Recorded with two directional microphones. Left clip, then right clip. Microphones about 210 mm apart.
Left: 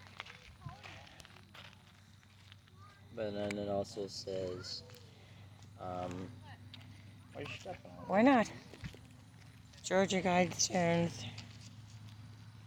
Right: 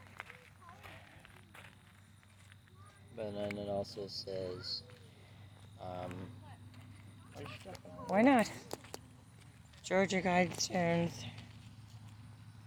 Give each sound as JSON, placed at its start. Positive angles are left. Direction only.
{"t": 0.1, "sound": "run", "side_deg": 0}
{"t": 3.2, "sound": "speech", "side_deg": 35}
{"t": 5.8, "sound": "speech", "side_deg": 35}
{"t": 7.7, "sound": "speech", "side_deg": 25}
{"t": 8.1, "sound": "speech", "side_deg": -5}
{"t": 9.8, "sound": "speech", "side_deg": 0}